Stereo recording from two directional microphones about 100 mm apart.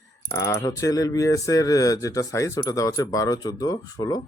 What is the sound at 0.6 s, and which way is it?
Speech, 35° left (ahead or behind).